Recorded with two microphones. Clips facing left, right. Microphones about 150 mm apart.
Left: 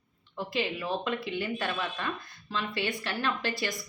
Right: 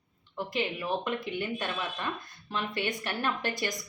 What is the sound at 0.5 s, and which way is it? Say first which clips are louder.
A woman's voice: even; 20° right (ahead or behind).